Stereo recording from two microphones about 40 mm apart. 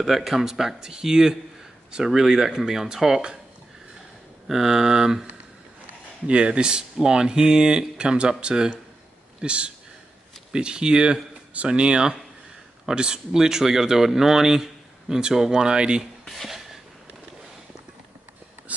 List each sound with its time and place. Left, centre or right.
0.0 s speech: centre
4.5 s speech: centre
6.2 s speech: right